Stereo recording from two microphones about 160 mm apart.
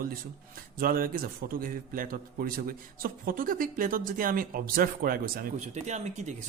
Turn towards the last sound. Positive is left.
turn(degrees=-45)  # may be behind; listen again after turning